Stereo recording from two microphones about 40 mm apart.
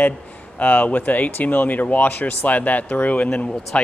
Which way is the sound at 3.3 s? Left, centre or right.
Left.